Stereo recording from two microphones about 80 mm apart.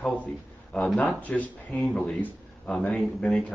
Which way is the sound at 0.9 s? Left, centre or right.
Centre.